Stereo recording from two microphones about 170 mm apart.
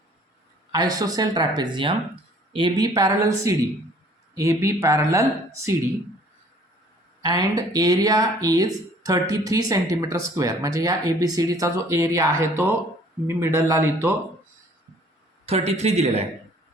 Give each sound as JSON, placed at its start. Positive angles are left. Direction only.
{"t": 0.7, "sound": "speech", "side_deg": -20}
{"t": 7.2, "sound": "speech", "side_deg": -20}
{"t": 15.4, "sound": "a man's voice", "side_deg": -40}